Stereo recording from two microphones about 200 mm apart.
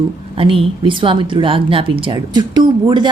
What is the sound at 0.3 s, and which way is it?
A woman's voice, 25° right (ahead or behind).